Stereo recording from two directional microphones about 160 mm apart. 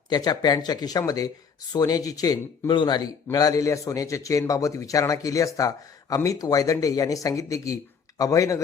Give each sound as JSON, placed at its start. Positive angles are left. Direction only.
{"t": 0.1, "sound": "a man's voice", "side_deg": 25}